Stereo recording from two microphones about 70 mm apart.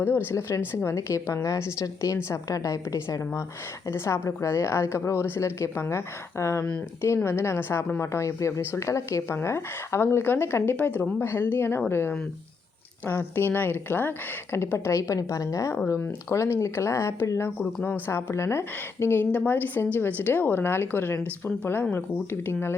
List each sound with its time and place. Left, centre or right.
0.3 s speech: left
0.9 s speech: left
3.9 s speech: left
16.0 s speech: left
17.6 s speech: centre
18.1 s a woman's voice: left